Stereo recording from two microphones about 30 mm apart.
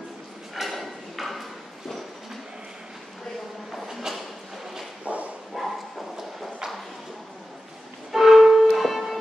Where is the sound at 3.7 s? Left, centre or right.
Centre.